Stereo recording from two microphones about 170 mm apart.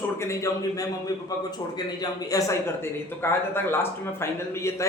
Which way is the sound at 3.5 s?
15° left (ahead or behind).